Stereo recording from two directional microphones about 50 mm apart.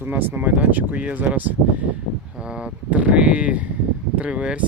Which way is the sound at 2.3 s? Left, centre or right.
Centre.